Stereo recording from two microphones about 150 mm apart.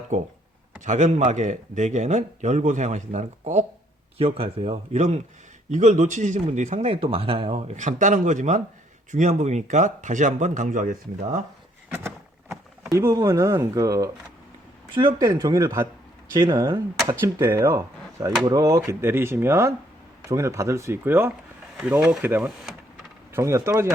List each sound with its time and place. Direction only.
0.9 s speech: 50° right (ahead or behind)
11.9 s vehicle: 15° right (ahead or behind)
12.9 s speech: 25° right (ahead or behind); by 22.7 s 5° right (ahead or behind)
23.3 s speech: 20° right (ahead or behind)